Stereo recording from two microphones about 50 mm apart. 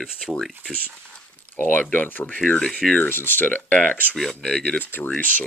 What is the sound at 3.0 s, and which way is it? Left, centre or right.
Speech, left.